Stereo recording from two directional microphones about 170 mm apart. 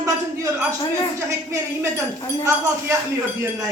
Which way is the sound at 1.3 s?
20° right (ahead or behind).